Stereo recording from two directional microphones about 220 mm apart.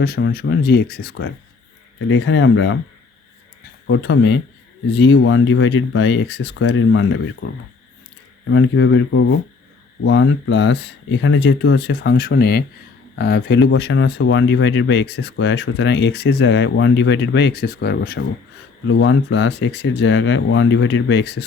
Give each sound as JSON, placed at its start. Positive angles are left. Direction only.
{"t": 0.0, "sound": "speech", "side_deg": 45}
{"t": 2.0, "sound": "speech", "side_deg": 60}
{"t": 3.8, "sound": "speech", "side_deg": 55}
{"t": 18.9, "sound": "speech", "side_deg": 65}